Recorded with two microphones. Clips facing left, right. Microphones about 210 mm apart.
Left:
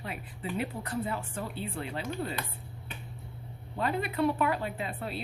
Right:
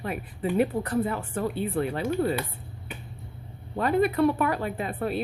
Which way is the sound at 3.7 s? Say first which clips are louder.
Right 8 dB; 55° right (ahead or behind).